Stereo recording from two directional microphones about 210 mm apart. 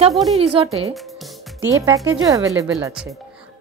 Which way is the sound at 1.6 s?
15° right (ahead or behind).